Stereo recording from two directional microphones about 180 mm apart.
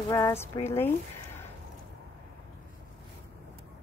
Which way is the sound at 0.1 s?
15° left (ahead or behind).